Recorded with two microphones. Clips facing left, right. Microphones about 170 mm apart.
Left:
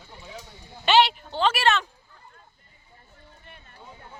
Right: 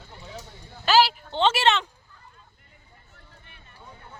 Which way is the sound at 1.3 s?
25° right (ahead or behind).